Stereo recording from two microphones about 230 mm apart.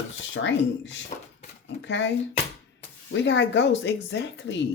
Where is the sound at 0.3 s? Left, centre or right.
Left.